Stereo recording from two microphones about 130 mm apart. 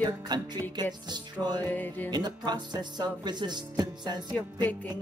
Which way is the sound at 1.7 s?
15° left (ahead or behind).